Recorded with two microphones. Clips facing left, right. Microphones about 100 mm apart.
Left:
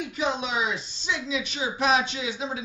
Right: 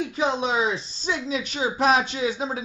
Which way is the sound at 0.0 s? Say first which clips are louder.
Right 4 dB; 35° right (ahead or behind).